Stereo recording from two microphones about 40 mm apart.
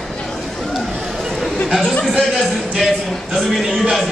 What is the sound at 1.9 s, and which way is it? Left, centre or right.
Speech, centre.